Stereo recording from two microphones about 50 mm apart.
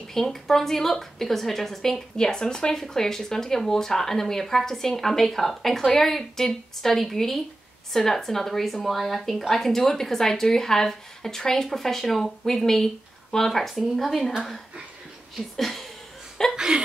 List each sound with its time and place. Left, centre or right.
0.1 s a woman's voice: centre
15.5 s speech: centre
16.5 s speech: centre